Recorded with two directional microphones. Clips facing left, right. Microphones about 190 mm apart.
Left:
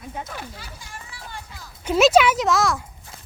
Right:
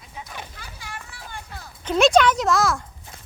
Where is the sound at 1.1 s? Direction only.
50° right (ahead or behind).